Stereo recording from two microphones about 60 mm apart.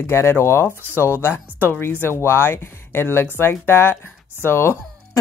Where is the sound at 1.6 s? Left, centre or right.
Left.